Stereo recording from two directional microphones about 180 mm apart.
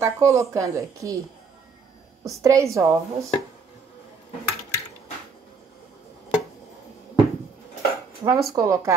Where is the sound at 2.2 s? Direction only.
15° right (ahead or behind).